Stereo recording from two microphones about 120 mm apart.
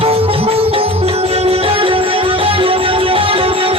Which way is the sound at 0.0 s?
50° right (ahead or behind).